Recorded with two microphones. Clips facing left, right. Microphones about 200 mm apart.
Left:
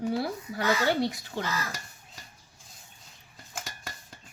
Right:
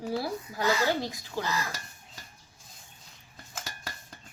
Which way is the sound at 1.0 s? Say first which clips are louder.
Left 4 dB; 65° left (ahead or behind).